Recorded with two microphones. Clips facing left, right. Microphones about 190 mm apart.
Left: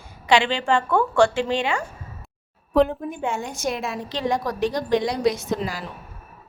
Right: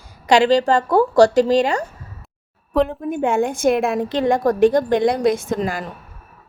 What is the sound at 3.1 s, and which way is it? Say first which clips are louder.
A woman's voice: right 9 dB; 55° right (ahead or behind).